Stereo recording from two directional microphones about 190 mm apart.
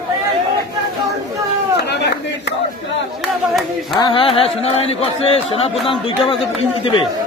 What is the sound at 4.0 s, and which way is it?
A man's voice, 25° left (ahead or behind).